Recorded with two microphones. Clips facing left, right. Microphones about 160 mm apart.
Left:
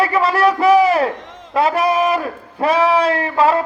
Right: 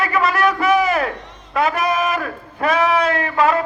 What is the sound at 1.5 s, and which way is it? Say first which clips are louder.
A man's voice: left 3 dB; 30° left (ahead or behind).